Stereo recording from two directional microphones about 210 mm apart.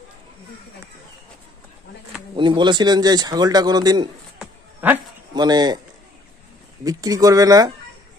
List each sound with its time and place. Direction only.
2.3 s speech: 20° right (ahead or behind)
4.8 s speech: 10° right (ahead or behind)
5.3 s speech: 20° right (ahead or behind)
6.8 s speech: 15° right (ahead or behind)